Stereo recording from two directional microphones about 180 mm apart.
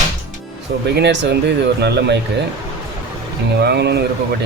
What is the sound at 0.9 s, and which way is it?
Speech, 75° right (ahead or behind).